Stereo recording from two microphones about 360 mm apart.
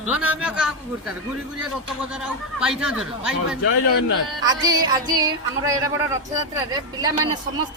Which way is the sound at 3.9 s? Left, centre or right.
Left.